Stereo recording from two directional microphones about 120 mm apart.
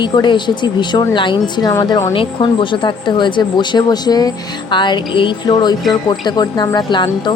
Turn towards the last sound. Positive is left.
turn(degrees=40)  # may be behind; listen again after turning